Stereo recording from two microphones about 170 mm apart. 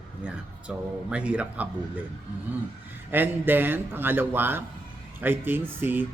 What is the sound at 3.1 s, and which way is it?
A man's voice, 10° right (ahead or behind).